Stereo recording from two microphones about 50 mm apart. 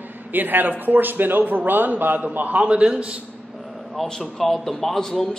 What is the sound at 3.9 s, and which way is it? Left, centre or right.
A man's voice, centre.